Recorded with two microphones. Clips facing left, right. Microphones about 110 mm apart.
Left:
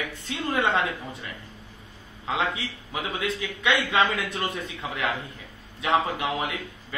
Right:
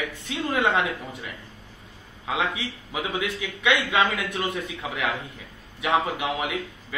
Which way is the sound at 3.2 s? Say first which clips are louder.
Even; 15° right (ahead or behind).